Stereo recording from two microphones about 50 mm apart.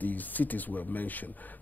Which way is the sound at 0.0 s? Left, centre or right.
Left.